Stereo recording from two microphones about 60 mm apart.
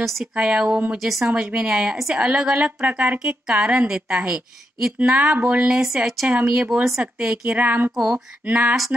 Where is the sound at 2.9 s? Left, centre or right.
Right.